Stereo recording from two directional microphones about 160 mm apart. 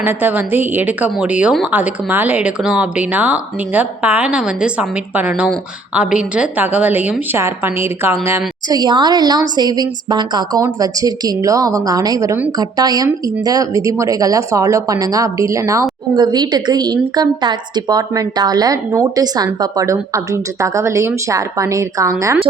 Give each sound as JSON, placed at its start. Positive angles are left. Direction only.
{"t": 0.0, "sound": "a woman's voice", "side_deg": -10}